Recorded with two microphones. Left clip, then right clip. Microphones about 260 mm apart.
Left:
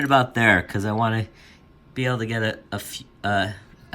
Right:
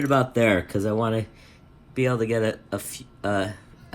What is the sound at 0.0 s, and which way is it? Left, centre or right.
Speech, left.